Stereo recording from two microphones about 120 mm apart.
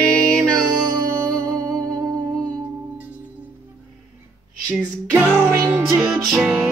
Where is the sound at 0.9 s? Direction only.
30° right (ahead or behind).